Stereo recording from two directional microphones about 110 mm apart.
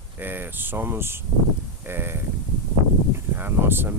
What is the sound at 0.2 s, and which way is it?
Speech, 20° right (ahead or behind).